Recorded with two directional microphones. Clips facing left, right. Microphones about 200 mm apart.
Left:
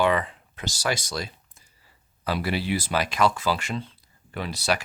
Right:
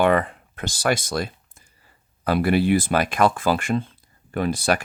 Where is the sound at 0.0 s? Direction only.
55° right (ahead or behind).